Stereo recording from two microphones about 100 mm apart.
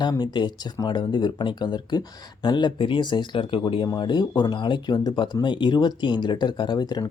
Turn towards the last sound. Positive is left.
turn(degrees=45)  # may be behind; listen again after turning